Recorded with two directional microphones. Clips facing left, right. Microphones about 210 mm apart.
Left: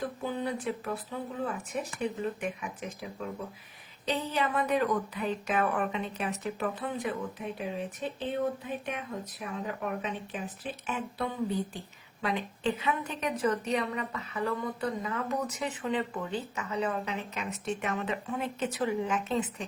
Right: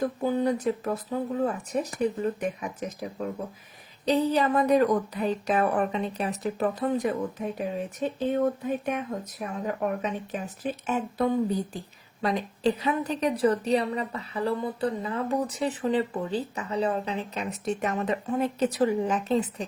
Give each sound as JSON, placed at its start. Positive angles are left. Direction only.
{"t": 0.0, "sound": "speech", "side_deg": -45}